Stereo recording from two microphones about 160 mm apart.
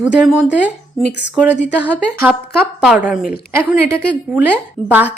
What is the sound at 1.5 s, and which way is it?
Speech, 90° left.